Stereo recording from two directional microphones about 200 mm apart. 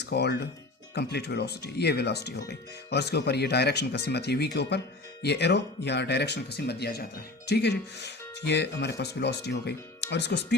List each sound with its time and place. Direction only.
0.0 s speech: 55° left (ahead or behind)